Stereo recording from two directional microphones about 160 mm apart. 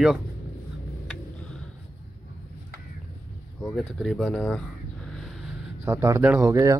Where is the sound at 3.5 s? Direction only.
Centre (ahead or behind).